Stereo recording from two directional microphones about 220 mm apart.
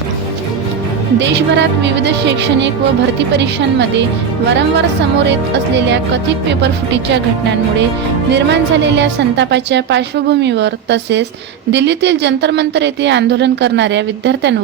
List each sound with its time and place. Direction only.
1.2 s a woman's voice: 50° right (ahead or behind)
6.5 s a woman's voice: 50° right (ahead or behind)
8.3 s a woman's voice: 50° right (ahead or behind)